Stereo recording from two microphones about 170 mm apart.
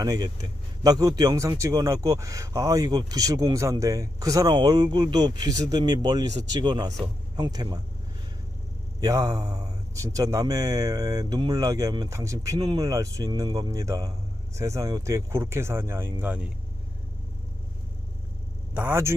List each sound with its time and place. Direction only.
0.0 s speech: 20° right (ahead or behind)
9.0 s speech: 20° right (ahead or behind)
18.7 s speech: 10° right (ahead or behind)